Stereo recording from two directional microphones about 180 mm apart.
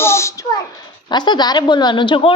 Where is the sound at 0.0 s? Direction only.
15° left (ahead or behind).